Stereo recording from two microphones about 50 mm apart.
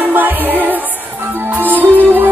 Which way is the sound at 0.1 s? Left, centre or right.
Right.